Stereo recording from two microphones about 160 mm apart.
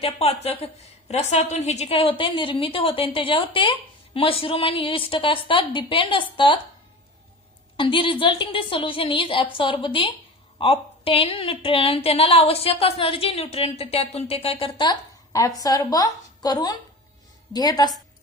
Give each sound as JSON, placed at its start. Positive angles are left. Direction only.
{"t": 0.0, "sound": "a woman's voice", "side_deg": 40}
{"t": 7.7, "sound": "a woman's voice", "side_deg": 35}